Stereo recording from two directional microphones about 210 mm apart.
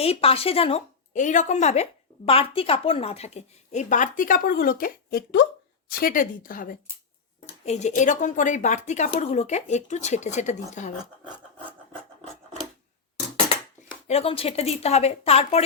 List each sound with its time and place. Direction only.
0.0 s a woman's voice: 25° left (ahead or behind)
11.0 s speech: 20° right (ahead or behind)
14.1 s a woman's voice: 30° left (ahead or behind)